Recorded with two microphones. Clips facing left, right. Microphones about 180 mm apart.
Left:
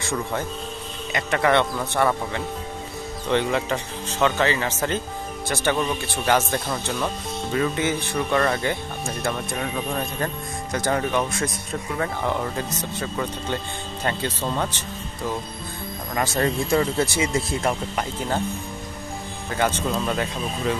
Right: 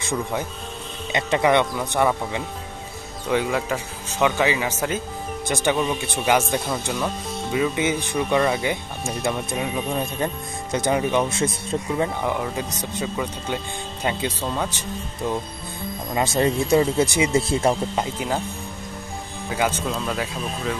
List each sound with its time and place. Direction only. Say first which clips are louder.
0.0 s speech: right 1 dB; 15° right (ahead or behind)
12.0 s speech: left 2 dB; 10° right (ahead or behind)
16.1 s speech: right 2 dB; 20° right (ahead or behind)
19.5 s speech: left 1 dB; 10° right (ahead or behind)